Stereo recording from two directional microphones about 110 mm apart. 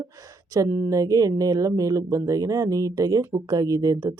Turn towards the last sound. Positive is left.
turn(degrees=-35)  # may be behind; listen again after turning